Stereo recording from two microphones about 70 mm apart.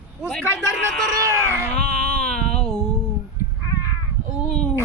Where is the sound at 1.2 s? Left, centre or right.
Right.